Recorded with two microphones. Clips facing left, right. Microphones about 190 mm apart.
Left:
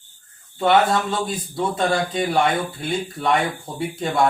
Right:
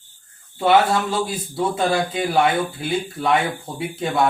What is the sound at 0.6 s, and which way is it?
Speech, 10° right (ahead or behind).